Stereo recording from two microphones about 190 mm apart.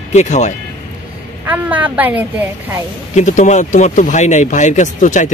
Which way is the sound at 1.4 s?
10° right (ahead or behind).